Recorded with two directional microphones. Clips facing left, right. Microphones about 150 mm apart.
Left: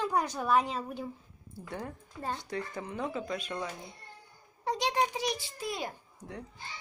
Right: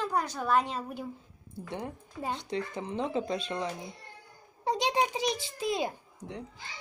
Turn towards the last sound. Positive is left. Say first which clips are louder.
# right 2 dB
turn(degrees=-20)  # may be behind; listen again after turning